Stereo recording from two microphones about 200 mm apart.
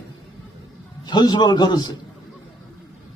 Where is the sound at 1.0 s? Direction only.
20° left (ahead or behind).